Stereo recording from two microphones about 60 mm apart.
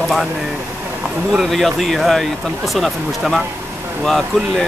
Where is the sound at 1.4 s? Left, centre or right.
Centre.